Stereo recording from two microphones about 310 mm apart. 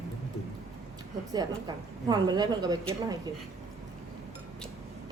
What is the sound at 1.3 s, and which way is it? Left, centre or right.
A woman's voice, centre.